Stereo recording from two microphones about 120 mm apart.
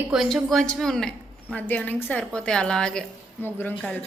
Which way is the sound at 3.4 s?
15° left (ahead or behind).